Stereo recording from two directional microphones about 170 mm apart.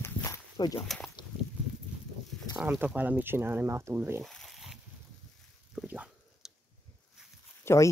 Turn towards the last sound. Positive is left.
turn(degrees=15)  # may be behind; listen again after turning